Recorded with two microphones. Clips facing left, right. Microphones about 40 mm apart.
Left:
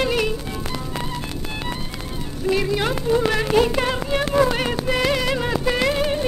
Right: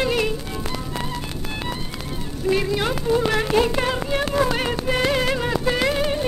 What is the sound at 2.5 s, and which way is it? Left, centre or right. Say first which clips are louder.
Music: left 1 dB; centre.